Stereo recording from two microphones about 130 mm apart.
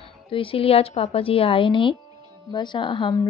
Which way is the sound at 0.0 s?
45° left (ahead or behind).